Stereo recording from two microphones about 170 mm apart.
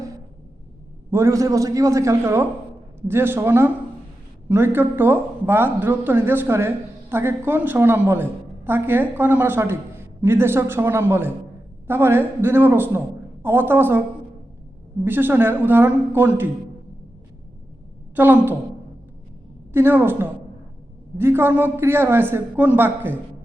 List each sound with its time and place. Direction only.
1.1 s speech: 15° right (ahead or behind)
15.0 s speech: 10° right (ahead or behind)
18.2 s speech: 10° right (ahead or behind)
19.7 s speech: 15° right (ahead or behind)